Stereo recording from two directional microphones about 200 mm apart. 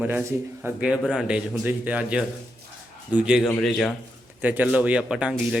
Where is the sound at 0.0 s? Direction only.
10° right (ahead or behind).